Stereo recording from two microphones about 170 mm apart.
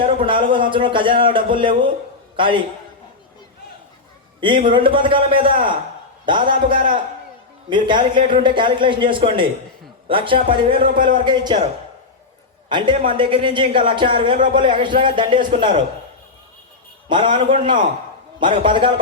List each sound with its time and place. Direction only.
0.0 s a man's voice: 30° right (ahead or behind)
4.6 s a man's voice: 30° right (ahead or behind)
12.6 s a man's voice: 30° right (ahead or behind)
17.1 s a man's voice: 30° right (ahead or behind)